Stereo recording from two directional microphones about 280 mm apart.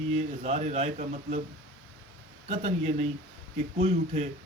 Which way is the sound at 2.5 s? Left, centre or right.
Right.